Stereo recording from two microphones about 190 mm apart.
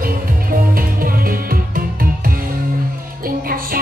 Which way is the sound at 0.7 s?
50° right (ahead or behind).